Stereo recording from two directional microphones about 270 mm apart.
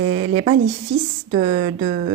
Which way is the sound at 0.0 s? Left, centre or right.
Right.